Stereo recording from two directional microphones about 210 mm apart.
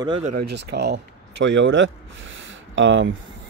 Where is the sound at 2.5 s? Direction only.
60° right (ahead or behind).